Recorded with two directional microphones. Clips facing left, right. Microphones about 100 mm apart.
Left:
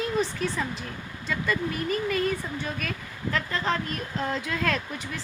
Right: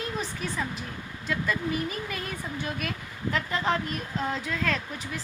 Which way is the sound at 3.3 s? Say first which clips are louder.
Even; 15° right (ahead or behind).